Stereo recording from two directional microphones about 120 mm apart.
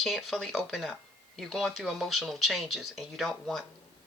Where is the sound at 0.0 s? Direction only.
Centre (ahead or behind).